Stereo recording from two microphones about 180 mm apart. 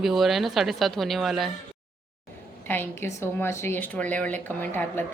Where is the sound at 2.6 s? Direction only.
10° left (ahead or behind).